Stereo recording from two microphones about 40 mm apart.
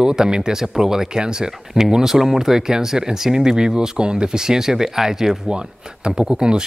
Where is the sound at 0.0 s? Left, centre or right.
Centre.